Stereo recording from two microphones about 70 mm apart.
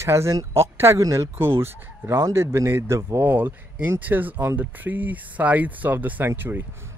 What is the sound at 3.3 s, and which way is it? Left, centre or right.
Speech, right.